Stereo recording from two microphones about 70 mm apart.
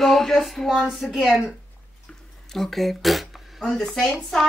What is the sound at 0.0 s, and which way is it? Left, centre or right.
Speech, centre.